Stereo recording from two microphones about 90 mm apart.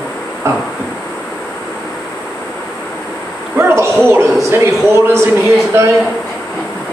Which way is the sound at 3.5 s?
25° right (ahead or behind).